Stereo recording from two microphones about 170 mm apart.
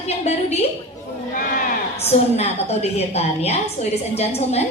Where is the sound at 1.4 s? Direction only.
55° left (ahead or behind).